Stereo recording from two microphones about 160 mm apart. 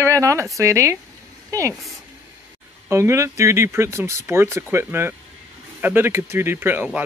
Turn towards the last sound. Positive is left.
turn(degrees=-10)  # may be behind; listen again after turning